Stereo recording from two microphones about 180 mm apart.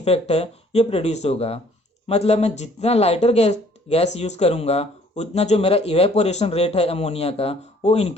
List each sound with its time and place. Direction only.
0.0 s speech: 35° left (ahead or behind)